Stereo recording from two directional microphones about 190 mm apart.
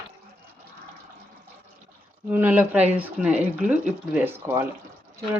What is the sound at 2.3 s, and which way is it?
Speech, 10° right (ahead or behind).